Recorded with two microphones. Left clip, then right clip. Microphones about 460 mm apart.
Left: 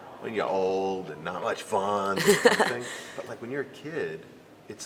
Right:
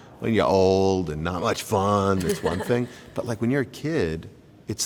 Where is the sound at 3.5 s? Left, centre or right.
Right.